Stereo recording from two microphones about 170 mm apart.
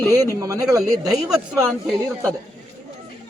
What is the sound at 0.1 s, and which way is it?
Speech, 20° right (ahead or behind).